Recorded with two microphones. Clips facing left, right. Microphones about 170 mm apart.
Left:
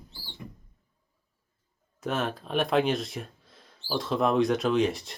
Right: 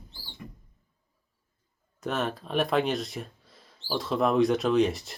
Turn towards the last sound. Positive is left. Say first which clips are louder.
# right 1 dB
turn(degrees=0)  # may be behind; listen again after turning